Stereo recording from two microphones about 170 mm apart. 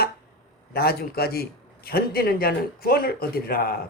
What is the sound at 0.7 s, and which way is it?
A man's voice, 65° left (ahead or behind).